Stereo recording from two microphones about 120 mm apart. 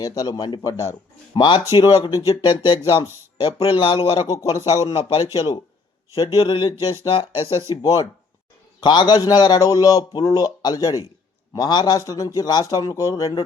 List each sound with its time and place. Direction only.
0.0 s a man's voice: 35° left (ahead or behind)
3.4 s speech: 45° left (ahead or behind)
4.3 s speech: 25° left (ahead or behind)
4.9 s speech: 50° left (ahead or behind)
5.2 s speech: 30° left (ahead or behind)
6.4 s speech: 50° left (ahead or behind)
7.4 s speech: 25° right (ahead or behind)
7.7 s a man's voice: 30° left (ahead or behind)